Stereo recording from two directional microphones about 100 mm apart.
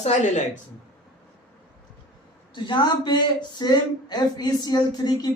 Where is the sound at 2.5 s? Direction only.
50° left (ahead or behind).